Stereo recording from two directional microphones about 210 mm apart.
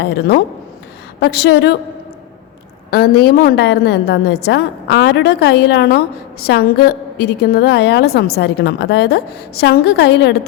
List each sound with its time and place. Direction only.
0.0 s a woman's voice: 50° left (ahead or behind)
2.9 s a woman's voice: 50° left (ahead or behind)